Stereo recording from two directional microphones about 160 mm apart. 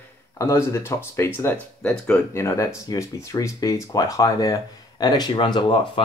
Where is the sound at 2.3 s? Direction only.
15° left (ahead or behind).